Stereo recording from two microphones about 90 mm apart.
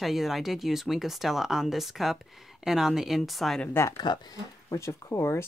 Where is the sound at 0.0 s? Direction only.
5° right (ahead or behind).